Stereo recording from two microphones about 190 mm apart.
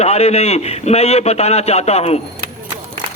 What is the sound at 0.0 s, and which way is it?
A man's voice, 35° left (ahead or behind).